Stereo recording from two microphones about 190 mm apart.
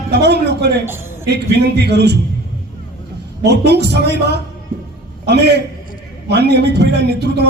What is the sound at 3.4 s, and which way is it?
A man's voice, 60° right (ahead or behind).